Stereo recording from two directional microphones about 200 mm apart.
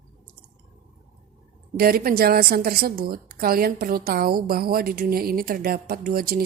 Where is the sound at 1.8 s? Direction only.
50° right (ahead or behind).